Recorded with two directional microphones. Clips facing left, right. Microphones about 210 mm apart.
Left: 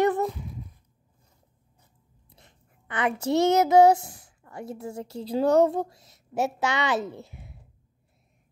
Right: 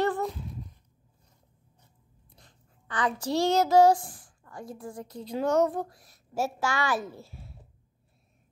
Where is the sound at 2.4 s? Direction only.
20° left (ahead or behind).